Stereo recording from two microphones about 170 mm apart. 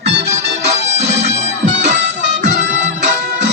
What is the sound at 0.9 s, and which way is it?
Bagpipes, 40° right (ahead or behind).